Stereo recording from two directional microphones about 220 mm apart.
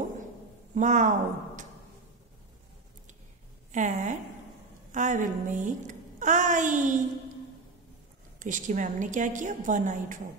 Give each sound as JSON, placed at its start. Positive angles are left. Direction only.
{"t": 0.7, "sound": "a woman's voice", "side_deg": -35}
{"t": 3.7, "sound": "a woman's voice", "side_deg": -35}
{"t": 8.4, "sound": "a woman's voice", "side_deg": -35}